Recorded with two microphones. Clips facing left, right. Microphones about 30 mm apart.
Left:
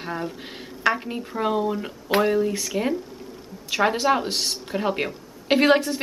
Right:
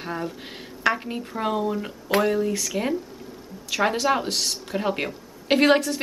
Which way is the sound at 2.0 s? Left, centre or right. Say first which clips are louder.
Left 1 dB; left.